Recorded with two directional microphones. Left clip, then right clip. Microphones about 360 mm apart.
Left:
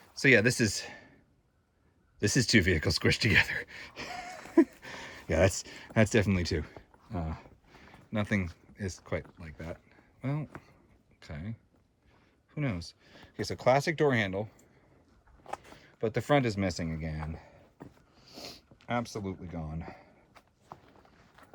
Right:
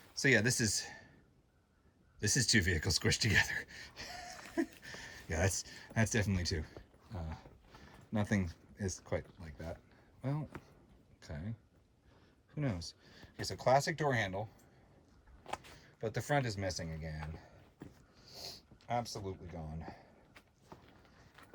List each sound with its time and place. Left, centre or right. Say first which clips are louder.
0.1 s speech: left 7 dB; centre
2.1 s speech: left 5 dB; centre
12.8 s speech: left 2 dB; centre
15.4 s speech: left 3 dB; centre
17.0 s sniff: left 6 dB; centre